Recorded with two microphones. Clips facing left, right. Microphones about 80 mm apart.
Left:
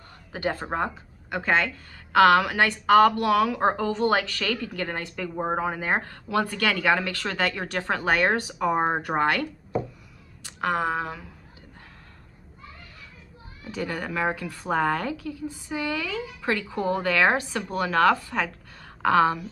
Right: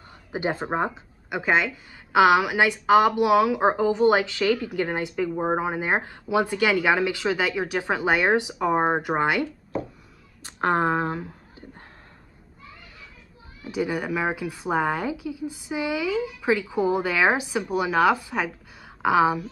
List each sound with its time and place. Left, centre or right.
0.3 s a woman's voice: centre
10.4 s speech: right
13.7 s a woman's voice: centre